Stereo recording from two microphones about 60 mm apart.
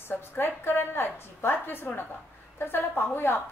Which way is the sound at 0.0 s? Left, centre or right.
Left.